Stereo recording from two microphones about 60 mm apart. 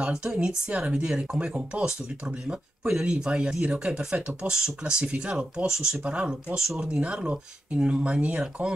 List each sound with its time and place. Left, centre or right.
0.1 s speech: centre